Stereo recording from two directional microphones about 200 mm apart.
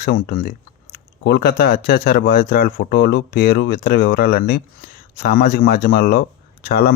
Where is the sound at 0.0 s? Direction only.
45° left (ahead or behind).